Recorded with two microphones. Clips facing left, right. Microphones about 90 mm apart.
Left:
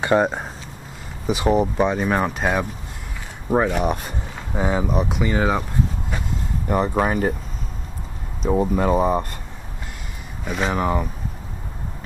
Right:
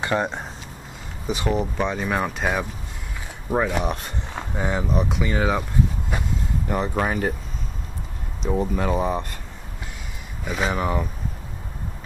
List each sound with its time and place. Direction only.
0.1 s speech: 35° left (ahead or behind)
1.2 s speech: 5° left (ahead or behind)
3.4 s speech: 15° left (ahead or behind)
3.8 s speech: 5° left (ahead or behind)
6.7 s speech: 10° left (ahead or behind)
8.5 s speech: 10° left (ahead or behind)
10.4 s speech: centre (ahead or behind)